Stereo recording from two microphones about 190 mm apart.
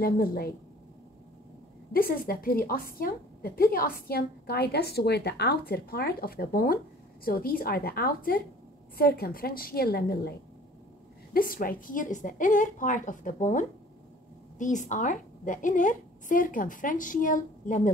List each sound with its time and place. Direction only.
0.0 s a woman's voice: 50° left (ahead or behind)
1.9 s a woman's voice: 50° left (ahead or behind)
11.3 s a woman's voice: 50° left (ahead or behind)